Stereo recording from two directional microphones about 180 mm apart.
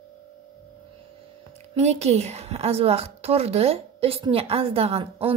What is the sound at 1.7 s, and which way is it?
A woman's voice, 35° right (ahead or behind).